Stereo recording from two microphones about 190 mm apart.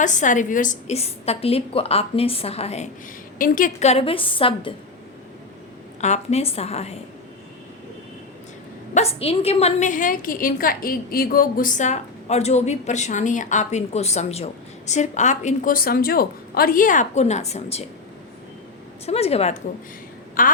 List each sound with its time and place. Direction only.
0.0 s a woman's voice: 40° left (ahead or behind)
3.3 s a woman's voice: 45° left (ahead or behind); by 4.7 s 25° left (ahead or behind)
6.0 s a woman's voice: 35° left (ahead or behind)
9.0 s a woman's voice: 30° left (ahead or behind)
19.0 s a woman's voice: 35° left (ahead or behind)
20.4 s a woman's voice: 45° left (ahead or behind)